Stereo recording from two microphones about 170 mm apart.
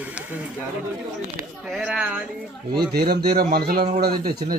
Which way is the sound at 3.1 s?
70° right (ahead or behind).